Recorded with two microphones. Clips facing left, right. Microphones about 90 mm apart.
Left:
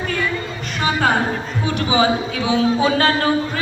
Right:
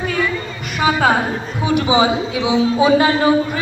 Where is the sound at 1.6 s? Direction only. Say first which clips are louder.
Right 3 dB; 15° right (ahead or behind).